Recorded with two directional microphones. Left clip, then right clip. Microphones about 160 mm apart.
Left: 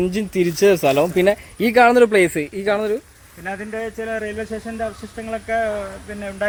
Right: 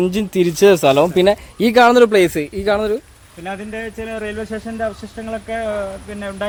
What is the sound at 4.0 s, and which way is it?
Speech, 20° right (ahead or behind).